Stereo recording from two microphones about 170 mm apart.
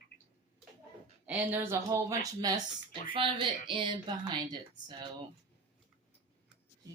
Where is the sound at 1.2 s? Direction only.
10° right (ahead or behind); by 5.1 s 25° right (ahead or behind).